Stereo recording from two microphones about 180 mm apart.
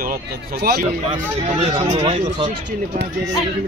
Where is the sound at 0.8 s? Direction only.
30° right (ahead or behind).